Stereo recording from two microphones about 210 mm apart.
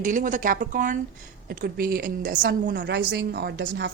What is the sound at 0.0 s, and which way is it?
A woman's voice, 35° right (ahead or behind).